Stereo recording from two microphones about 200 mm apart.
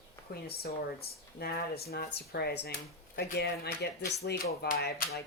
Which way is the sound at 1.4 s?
50° left (ahead or behind).